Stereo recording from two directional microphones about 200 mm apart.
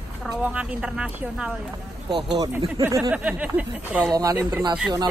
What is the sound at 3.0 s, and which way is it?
Speech, 5° right (ahead or behind).